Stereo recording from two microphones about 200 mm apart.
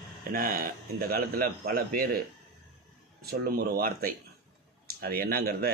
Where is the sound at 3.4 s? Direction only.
50° right (ahead or behind).